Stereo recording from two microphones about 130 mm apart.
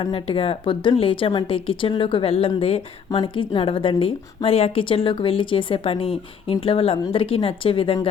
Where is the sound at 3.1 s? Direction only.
35° left (ahead or behind).